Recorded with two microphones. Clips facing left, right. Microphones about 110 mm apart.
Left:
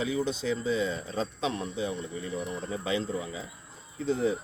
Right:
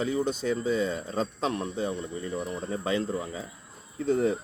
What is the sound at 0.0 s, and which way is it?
Speech, 45° right (ahead or behind).